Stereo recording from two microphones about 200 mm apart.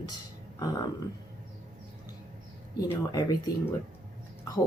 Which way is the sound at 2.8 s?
15° left (ahead or behind).